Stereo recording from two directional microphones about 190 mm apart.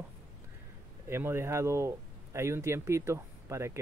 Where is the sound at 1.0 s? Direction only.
10° right (ahead or behind).